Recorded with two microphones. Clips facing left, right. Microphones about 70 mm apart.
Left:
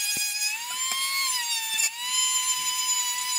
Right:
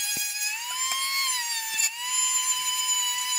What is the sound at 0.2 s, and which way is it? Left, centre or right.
Emergency vehicle, centre.